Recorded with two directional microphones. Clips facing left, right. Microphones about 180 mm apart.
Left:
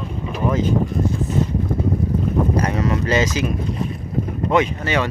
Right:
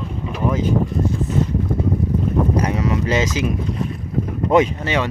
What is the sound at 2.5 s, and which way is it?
Speech, 10° right (ahead or behind).